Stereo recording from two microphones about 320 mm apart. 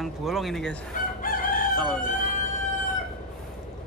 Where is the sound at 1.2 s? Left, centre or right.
Left.